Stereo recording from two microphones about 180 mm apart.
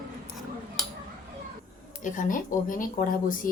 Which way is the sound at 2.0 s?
45° left (ahead or behind).